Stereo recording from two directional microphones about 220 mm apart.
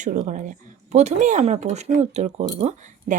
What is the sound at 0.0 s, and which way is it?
Speech, 40° right (ahead or behind).